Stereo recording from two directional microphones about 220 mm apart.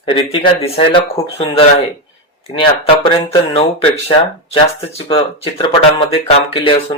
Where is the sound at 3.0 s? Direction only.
20° left (ahead or behind).